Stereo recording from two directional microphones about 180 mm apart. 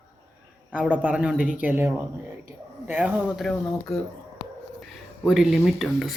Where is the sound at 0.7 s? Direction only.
10° right (ahead or behind).